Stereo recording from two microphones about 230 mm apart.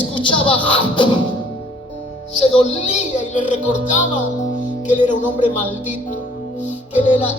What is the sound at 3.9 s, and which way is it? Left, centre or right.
Speech, left.